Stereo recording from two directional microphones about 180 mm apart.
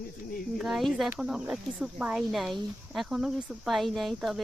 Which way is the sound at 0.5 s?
Centre (ahead or behind).